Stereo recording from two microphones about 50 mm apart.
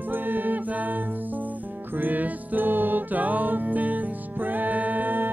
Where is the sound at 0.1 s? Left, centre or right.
Right.